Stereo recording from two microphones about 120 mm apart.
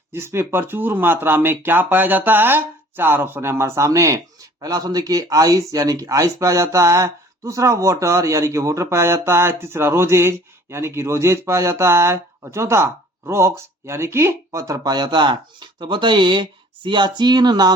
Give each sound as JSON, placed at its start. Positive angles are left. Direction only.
{"t": 0.1, "sound": "speech", "side_deg": -20}